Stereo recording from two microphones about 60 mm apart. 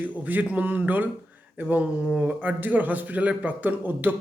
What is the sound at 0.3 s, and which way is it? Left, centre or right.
Speech, right.